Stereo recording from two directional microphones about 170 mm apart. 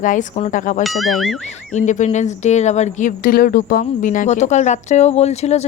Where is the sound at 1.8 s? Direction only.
45° left (ahead or behind).